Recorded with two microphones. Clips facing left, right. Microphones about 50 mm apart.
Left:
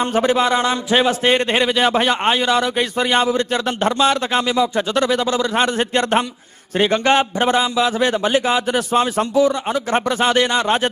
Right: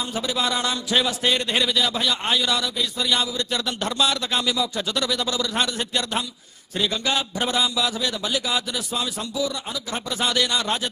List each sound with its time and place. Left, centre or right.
0.0 s a man's voice: left